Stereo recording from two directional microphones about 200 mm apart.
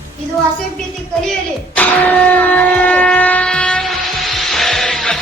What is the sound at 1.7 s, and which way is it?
Shofar, 10° left (ahead or behind).